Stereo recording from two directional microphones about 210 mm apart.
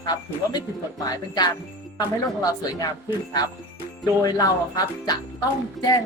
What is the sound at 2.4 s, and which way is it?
Speech, 15° left (ahead or behind).